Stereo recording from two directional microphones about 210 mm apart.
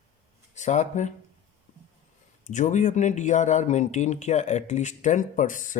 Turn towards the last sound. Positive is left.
turn(degrees=40)  # may be behind; listen again after turning